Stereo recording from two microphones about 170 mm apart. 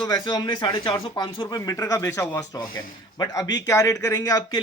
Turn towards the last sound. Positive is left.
turn(degrees=20)  # may be behind; listen again after turning